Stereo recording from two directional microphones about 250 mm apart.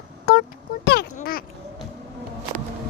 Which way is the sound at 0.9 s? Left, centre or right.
Left.